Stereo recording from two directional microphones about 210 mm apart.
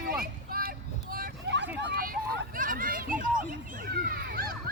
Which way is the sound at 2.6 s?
40° right (ahead or behind).